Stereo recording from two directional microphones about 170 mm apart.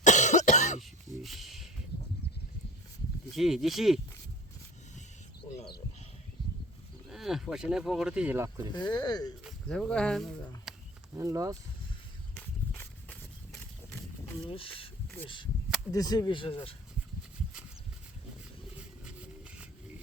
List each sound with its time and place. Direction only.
0.0 s cough: 45° left (ahead or behind)
0.8 s a sound: centre (ahead or behind)
3.3 s speech: centre (ahead or behind)
7.1 s speech: centre (ahead or behind)
8.7 s speech: 25° left (ahead or behind)
9.4 s speech: centre (ahead or behind)
11.1 s speech: 20° right (ahead or behind)
12.4 s walk: 10° left (ahead or behind)
14.4 s speech: 30° left (ahead or behind)
15.9 s speech: 20° left (ahead or behind)
19.0 s a sound: 5° right (ahead or behind)